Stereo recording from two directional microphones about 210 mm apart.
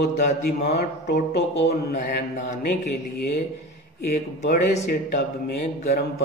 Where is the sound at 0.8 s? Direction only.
50° left (ahead or behind).